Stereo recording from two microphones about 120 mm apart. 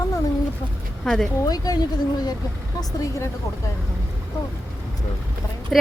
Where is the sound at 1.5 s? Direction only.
35° left (ahead or behind).